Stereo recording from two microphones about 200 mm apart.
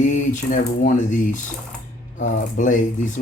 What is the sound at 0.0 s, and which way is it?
Speech, 40° left (ahead or behind).